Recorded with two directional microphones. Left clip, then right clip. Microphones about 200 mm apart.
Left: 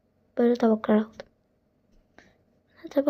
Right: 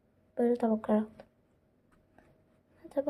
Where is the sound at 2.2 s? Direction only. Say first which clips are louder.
Left 8 dB; 15° left (ahead or behind).